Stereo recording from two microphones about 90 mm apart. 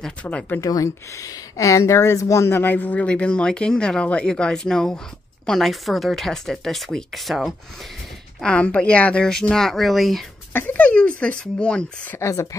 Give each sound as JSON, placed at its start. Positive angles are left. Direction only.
{"t": 0.0, "sound": "speech", "side_deg": 15}
{"t": 0.6, "sound": "speech", "side_deg": 40}
{"t": 8.4, "sound": "speech", "side_deg": 15}
{"t": 10.5, "sound": "speech", "side_deg": 20}
{"t": 12.2, "sound": "speech", "side_deg": 35}